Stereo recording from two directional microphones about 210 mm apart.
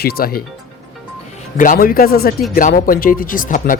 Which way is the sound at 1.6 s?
40° left (ahead or behind).